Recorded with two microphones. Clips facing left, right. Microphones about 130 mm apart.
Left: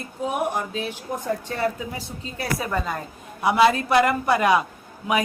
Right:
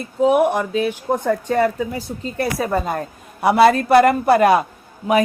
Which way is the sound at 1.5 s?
45° right (ahead or behind).